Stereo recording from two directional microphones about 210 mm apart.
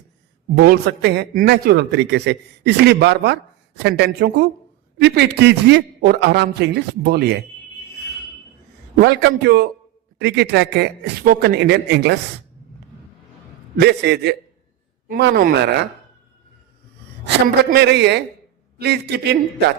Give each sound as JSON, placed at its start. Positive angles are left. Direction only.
{"t": 0.5, "sound": "a man's voice", "side_deg": -50}
{"t": 9.0, "sound": "a man's voice", "side_deg": -50}
{"t": 13.7, "sound": "a man's voice", "side_deg": -50}
{"t": 17.2, "sound": "a man's voice", "side_deg": -50}